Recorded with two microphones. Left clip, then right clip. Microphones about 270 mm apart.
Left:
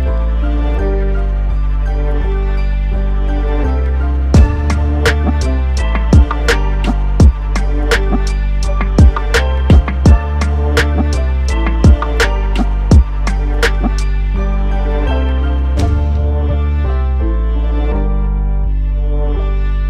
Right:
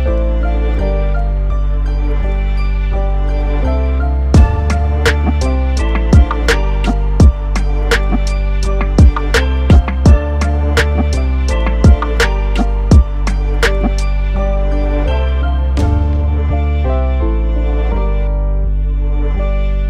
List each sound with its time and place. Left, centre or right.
4.3 s music: centre